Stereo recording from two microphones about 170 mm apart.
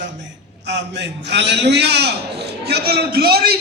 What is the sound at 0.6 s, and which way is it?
A man's voice, 90° right.